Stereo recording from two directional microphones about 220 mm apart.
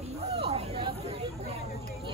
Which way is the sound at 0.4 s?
25° right (ahead or behind).